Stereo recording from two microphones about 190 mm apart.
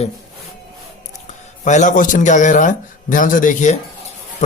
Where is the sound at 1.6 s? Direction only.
40° left (ahead or behind).